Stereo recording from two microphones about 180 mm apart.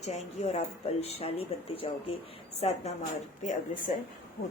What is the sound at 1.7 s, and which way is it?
Speech, 30° left (ahead or behind).